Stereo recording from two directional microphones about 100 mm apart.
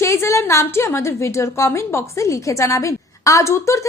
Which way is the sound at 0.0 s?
30° left (ahead or behind).